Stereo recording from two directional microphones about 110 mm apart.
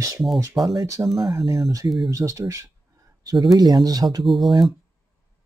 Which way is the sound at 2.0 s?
30° right (ahead or behind).